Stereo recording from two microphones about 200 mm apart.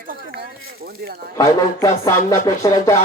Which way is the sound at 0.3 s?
50° right (ahead or behind).